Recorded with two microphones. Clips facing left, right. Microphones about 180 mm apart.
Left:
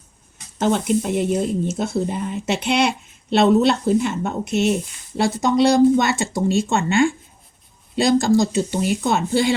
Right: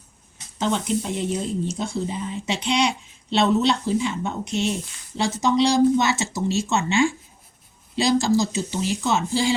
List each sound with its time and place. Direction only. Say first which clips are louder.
0.6 s a woman's voice: left 5 dB; 55° left (ahead or behind)